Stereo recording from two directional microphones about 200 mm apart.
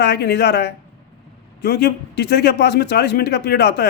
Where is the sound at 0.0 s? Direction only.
55° left (ahead or behind).